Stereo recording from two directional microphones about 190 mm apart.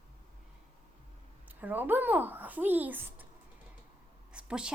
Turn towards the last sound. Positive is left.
turn(degrees=-5)  # may be behind; listen again after turning